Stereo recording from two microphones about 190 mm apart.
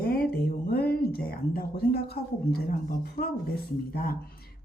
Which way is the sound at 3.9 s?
50° left (ahead or behind).